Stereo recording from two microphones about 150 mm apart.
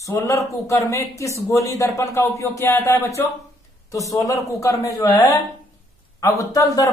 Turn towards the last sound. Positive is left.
turn(degrees=25)  # may be behind; listen again after turning